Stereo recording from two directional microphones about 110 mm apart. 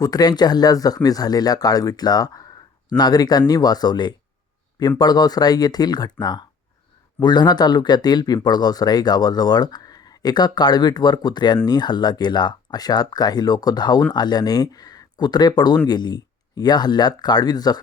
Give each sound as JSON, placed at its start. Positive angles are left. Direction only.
{"t": 0.0, "sound": "speech", "side_deg": 35}